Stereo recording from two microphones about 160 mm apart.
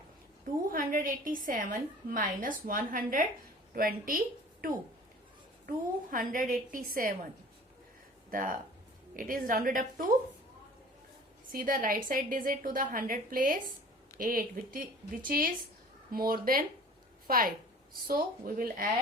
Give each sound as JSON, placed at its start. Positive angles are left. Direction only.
{"t": 0.7, "sound": "a woman's voice", "side_deg": -60}
{"t": 8.3, "sound": "a woman's voice", "side_deg": -60}
{"t": 11.5, "sound": "a woman's voice", "side_deg": -60}